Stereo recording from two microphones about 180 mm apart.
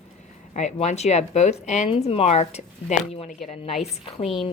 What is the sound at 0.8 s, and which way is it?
Speech, 40° left (ahead or behind).